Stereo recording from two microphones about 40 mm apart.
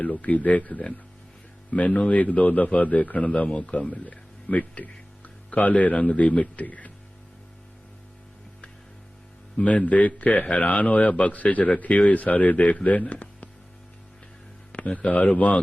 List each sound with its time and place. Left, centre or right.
0.0 s speech: left
9.6 s speech: left
14.7 s speech: left